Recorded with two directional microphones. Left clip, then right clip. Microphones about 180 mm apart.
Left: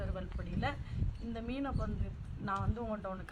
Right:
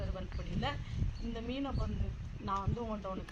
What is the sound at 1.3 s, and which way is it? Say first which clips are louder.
A woman's voice: even; 25° left (ahead or behind).